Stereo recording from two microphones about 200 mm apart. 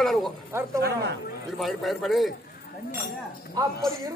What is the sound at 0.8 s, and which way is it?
Speech, 55° right (ahead or behind).